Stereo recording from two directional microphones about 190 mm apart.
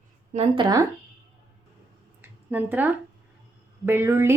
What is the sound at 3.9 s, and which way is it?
Speech, 10° right (ahead or behind).